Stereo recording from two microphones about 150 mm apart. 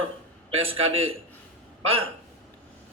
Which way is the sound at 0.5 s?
40° right (ahead or behind).